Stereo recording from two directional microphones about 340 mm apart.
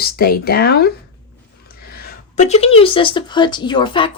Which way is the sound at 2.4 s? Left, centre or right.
Centre.